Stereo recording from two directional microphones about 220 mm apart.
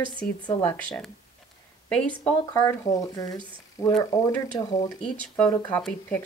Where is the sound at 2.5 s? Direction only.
15° left (ahead or behind).